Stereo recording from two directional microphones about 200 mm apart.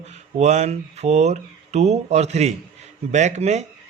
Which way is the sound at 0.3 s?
35° right (ahead or behind).